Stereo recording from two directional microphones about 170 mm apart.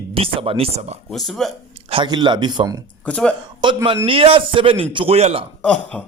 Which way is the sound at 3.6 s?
30° right (ahead or behind).